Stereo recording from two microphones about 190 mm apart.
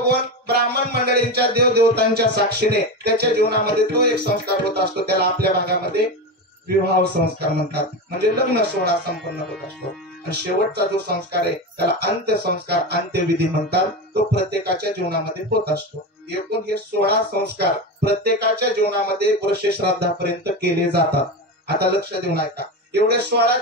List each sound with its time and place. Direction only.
0.0 s music: 60° right (ahead or behind)
7.3 s music: 55° right (ahead or behind)
10.3 s music: 60° right (ahead or behind)
16.3 s music: 55° right (ahead or behind)